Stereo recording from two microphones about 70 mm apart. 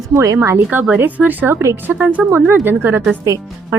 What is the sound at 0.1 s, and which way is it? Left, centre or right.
Speech, right.